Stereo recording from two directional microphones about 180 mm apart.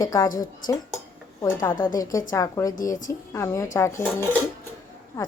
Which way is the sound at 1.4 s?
25° left (ahead or behind).